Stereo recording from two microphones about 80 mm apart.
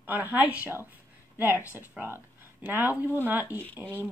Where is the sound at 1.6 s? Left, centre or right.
Left.